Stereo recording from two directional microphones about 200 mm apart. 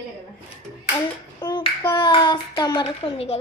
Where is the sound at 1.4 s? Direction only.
20° left (ahead or behind).